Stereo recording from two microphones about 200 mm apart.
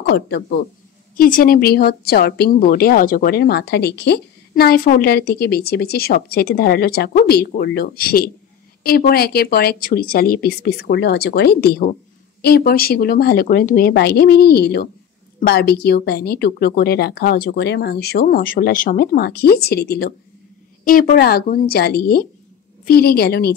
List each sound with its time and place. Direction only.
0.0 s speech: 55° left (ahead or behind)